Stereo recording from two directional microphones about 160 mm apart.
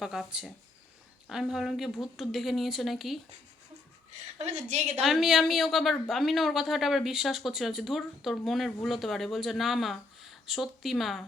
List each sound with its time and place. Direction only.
0.0 s speech: 5° right (ahead or behind)
4.4 s a woman's voice: 45° right (ahead or behind)
4.9 s speech: centre (ahead or behind)